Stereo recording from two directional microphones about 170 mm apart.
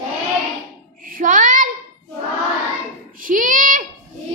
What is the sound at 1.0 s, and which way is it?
Child singing, 55° right (ahead or behind).